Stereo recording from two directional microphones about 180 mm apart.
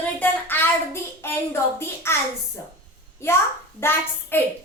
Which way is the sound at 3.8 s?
10° left (ahead or behind).